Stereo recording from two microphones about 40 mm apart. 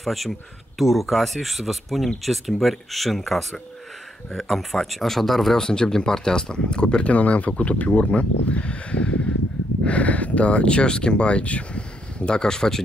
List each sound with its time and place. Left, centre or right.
0.0 s speech: centre
5.7 s speech: centre
12.4 s speech: centre